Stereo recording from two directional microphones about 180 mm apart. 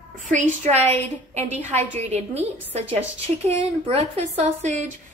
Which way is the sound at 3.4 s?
35° right (ahead or behind).